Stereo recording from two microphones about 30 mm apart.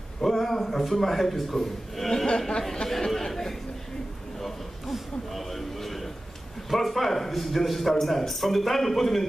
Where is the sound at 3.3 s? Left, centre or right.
Centre.